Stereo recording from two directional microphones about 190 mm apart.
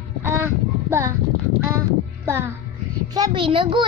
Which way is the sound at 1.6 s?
15° right (ahead or behind).